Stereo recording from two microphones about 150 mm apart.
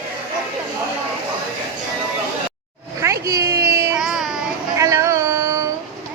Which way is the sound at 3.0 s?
20° right (ahead or behind).